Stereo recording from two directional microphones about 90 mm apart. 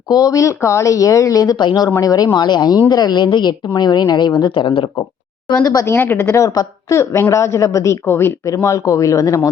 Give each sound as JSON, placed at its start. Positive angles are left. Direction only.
{"t": 0.1, "sound": "speech", "side_deg": 40}
{"t": 1.5, "sound": "speech", "side_deg": 55}
{"t": 2.0, "sound": "speech", "side_deg": 45}
{"t": 5.8, "sound": "speech", "side_deg": 25}
{"t": 7.0, "sound": "speech", "side_deg": 30}